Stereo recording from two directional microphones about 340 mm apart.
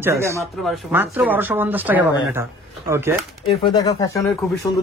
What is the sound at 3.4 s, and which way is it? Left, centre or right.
Speech, centre.